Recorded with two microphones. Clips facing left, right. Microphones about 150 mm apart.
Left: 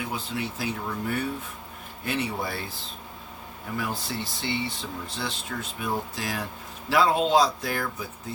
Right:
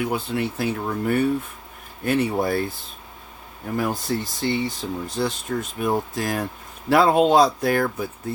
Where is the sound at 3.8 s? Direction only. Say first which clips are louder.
Right 7 dB; 45° right (ahead or behind).